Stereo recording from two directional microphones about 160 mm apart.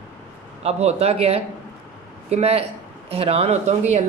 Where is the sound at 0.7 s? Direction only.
40° right (ahead or behind).